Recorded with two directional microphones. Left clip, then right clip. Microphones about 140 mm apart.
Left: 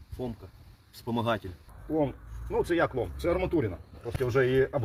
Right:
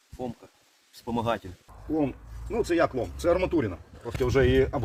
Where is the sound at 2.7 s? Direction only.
45° right (ahead or behind).